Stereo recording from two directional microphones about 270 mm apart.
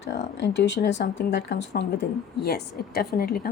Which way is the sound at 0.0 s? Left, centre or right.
Left.